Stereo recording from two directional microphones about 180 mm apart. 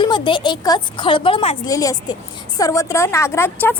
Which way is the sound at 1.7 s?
20° left (ahead or behind).